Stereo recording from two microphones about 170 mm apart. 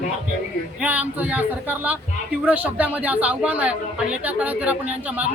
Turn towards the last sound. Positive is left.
turn(degrees=-10)  # may be behind; listen again after turning